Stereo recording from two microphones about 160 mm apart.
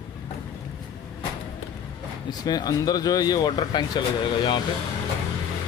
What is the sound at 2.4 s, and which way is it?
Speech, 25° left (ahead or behind).